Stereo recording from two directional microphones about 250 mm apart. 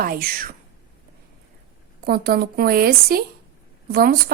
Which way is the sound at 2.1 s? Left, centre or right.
Right.